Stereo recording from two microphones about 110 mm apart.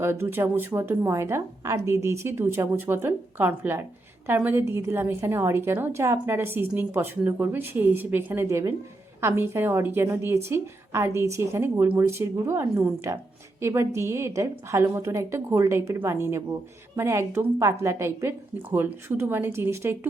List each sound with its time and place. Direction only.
0.0 s a woman's voice: 20° right (ahead or behind)